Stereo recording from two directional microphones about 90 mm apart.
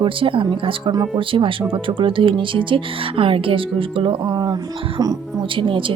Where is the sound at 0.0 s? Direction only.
75° right (ahead or behind).